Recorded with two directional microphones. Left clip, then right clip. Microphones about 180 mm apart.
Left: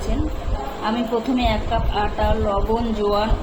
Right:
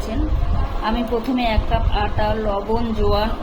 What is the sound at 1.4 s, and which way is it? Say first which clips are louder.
A woman's voice: even; 15° right (ahead or behind).